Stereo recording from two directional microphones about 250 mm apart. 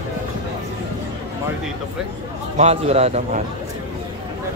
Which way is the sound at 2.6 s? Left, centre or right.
Right.